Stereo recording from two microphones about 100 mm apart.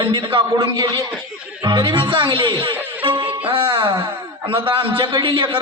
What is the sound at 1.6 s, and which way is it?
Speech, 55° right (ahead or behind).